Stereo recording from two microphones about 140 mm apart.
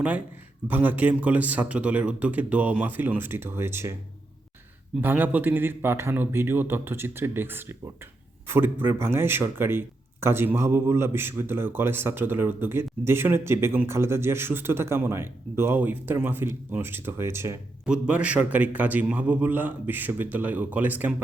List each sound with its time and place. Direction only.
0.7 s speech: 10° right (ahead or behind)
4.9 s speech: 15° right (ahead or behind)
17.8 s speech: 5° right (ahead or behind)